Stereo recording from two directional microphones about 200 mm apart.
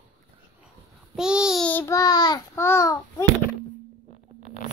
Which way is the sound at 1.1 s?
5° right (ahead or behind).